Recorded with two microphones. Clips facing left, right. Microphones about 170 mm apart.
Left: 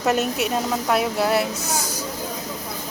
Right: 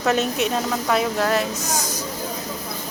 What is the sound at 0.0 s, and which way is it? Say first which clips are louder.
A woman's voice: right 1 dB; 10° left (ahead or behind).